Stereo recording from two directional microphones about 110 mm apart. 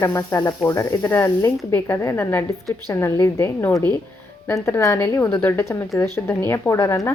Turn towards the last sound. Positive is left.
turn(degrees=25)  # may be behind; listen again after turning